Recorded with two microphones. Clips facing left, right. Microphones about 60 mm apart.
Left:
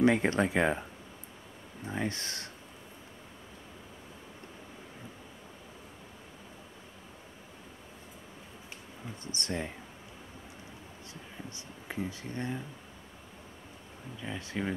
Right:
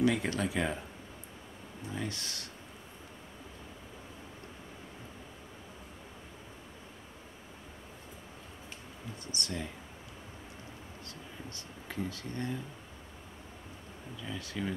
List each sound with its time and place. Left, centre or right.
0.0 s speech: left
1.9 s speech: left
9.2 s speech: left
11.5 s speech: centre
14.2 s speech: left